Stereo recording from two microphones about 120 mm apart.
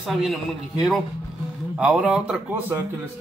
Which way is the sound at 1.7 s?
10° right (ahead or behind).